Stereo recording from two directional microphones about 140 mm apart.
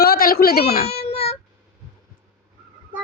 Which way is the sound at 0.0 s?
90° left.